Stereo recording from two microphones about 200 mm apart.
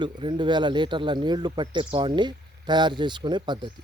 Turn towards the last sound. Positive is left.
turn(degrees=-20)  # may be behind; listen again after turning